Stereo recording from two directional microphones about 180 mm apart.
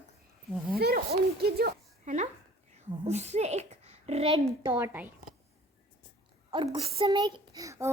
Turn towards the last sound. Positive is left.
turn(degrees=-15)  # may be behind; listen again after turning